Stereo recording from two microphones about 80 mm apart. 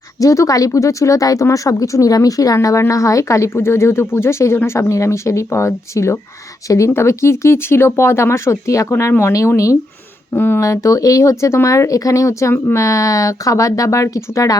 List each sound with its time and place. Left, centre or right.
0.2 s speech: left
10.3 s speech: left
10.6 s speech: left